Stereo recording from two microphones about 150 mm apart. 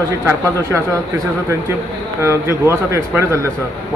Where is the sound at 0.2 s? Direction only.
20° right (ahead or behind).